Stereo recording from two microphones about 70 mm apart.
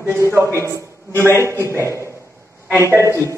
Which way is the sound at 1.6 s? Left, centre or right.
Right.